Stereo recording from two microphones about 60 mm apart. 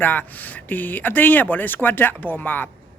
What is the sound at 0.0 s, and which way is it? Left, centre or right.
Speech, left.